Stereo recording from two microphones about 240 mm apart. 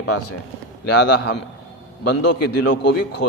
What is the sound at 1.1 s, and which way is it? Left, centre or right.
Speech, left.